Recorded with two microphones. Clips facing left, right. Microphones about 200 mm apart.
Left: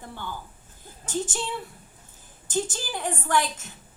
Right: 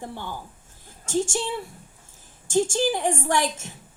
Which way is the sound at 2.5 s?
85° right.